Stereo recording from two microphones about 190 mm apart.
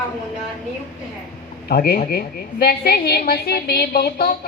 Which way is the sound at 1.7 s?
55° left (ahead or behind).